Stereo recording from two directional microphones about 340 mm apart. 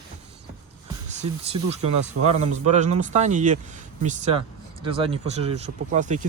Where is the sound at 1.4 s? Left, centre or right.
Centre.